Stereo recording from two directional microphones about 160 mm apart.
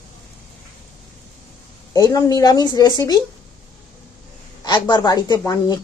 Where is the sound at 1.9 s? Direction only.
25° left (ahead or behind).